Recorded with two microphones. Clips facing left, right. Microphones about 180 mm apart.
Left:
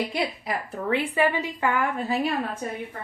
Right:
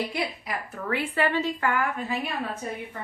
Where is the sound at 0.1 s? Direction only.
25° left (ahead or behind).